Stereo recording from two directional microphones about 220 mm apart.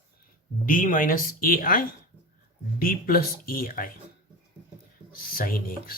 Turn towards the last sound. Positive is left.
turn(degrees=40)  # may be behind; listen again after turning